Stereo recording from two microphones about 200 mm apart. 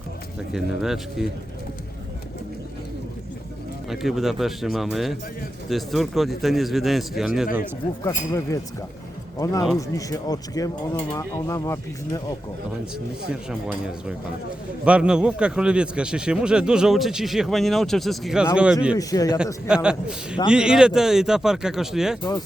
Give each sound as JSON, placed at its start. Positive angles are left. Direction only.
{"t": 0.3, "sound": "a man's voice", "side_deg": 0}
{"t": 3.8, "sound": "a man's voice", "side_deg": 0}
{"t": 8.0, "sound": "speech", "side_deg": 15}
{"t": 13.5, "sound": "a man's voice", "side_deg": -5}
{"t": 18.9, "sound": "speech", "side_deg": 15}
{"t": 19.6, "sound": "a man's voice", "side_deg": -5}
{"t": 22.2, "sound": "speech", "side_deg": 20}